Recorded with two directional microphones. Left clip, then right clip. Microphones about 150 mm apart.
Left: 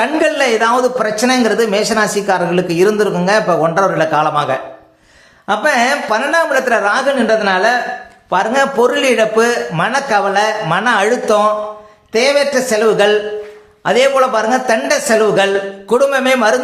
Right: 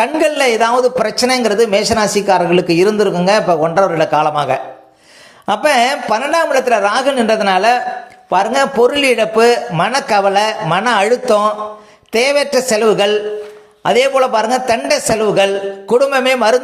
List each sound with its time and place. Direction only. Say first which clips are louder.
0.0 s a man's voice: even; 25° right (ahead or behind)
5.5 s speech: right 1 dB; 40° right (ahead or behind)
8.3 s a man's voice: even; 25° right (ahead or behind)